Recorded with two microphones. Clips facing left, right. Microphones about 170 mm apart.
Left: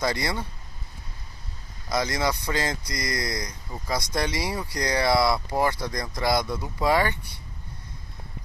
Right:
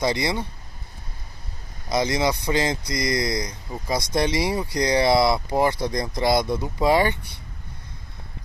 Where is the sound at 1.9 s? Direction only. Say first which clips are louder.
Right 4 dB; 20° right (ahead or behind).